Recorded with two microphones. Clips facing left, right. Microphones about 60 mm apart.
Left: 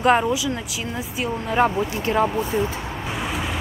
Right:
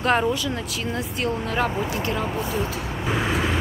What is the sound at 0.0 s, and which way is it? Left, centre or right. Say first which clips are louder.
Speech: left 3 dB; centre.